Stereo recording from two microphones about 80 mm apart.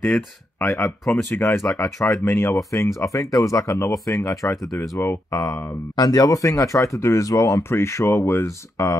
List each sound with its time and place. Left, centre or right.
0.0 s speech: centre
1.3 s speech: left
5.3 s speech: left